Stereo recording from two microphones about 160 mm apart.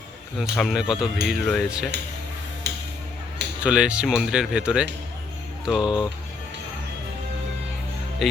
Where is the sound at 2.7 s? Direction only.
90° right.